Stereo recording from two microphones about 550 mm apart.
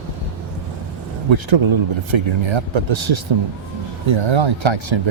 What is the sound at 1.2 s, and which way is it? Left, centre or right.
Speech, right.